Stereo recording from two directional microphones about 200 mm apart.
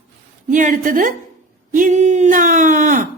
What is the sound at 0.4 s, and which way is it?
Speech, 40° right (ahead or behind).